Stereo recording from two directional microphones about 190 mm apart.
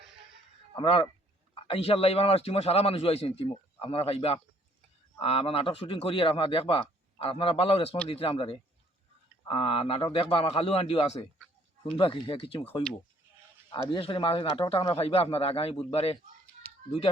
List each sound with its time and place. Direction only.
0.8 s a man's voice: 30° left (ahead or behind)
13.9 s a man's voice: 25° left (ahead or behind)